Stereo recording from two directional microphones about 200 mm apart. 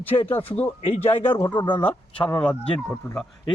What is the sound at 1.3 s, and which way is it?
Speech, 10° left (ahead or behind).